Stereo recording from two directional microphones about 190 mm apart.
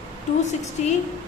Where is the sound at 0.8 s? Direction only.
35° left (ahead or behind).